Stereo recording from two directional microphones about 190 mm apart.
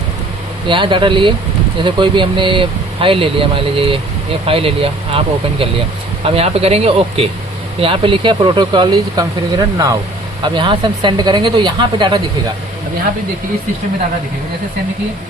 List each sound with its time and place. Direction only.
0.7 s speech: 25° right (ahead or behind)